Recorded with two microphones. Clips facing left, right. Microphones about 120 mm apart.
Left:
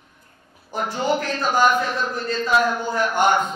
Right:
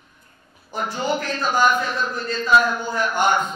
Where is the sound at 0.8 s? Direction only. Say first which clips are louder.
Left 2 dB; 50° left (ahead or behind).